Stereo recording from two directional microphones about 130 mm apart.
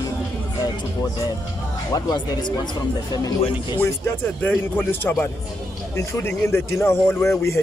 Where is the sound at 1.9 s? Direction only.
30° left (ahead or behind).